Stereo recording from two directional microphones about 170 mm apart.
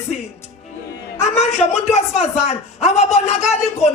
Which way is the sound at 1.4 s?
40° left (ahead or behind).